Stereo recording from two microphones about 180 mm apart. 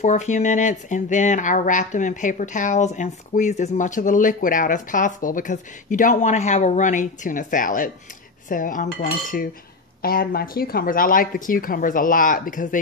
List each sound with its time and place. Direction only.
0.0 s speech: 45° left (ahead or behind)